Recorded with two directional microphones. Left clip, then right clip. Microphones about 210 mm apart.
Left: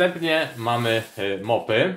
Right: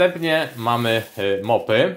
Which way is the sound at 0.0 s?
35° right (ahead or behind).